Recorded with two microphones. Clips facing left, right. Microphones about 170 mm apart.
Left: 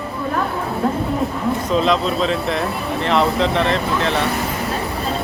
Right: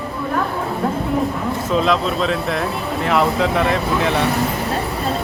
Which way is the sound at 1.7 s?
Centre (ahead or behind).